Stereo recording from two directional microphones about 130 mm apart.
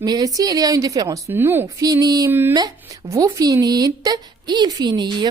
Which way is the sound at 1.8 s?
30° right (ahead or behind).